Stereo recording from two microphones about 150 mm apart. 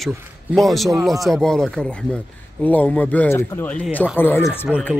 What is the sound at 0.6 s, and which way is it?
Speech, centre (ahead or behind).